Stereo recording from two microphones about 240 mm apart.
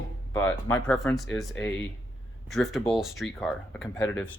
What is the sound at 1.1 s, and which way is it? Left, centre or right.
Speech, centre.